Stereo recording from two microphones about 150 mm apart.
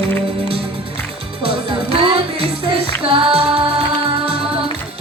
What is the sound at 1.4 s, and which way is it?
Music, 40° right (ahead or behind).